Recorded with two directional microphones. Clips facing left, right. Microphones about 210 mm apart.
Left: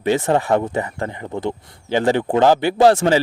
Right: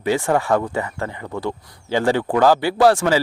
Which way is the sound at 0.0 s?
20° left (ahead or behind).